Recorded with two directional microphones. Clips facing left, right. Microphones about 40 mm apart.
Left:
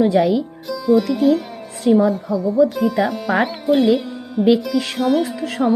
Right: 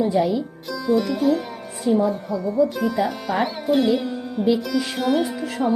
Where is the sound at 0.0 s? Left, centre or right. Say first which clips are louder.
Left 5 dB; left.